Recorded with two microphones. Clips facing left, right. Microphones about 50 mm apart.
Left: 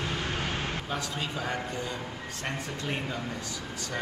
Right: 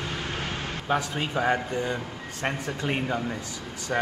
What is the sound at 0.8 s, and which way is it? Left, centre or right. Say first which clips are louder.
A man's voice: right 6 dB; right.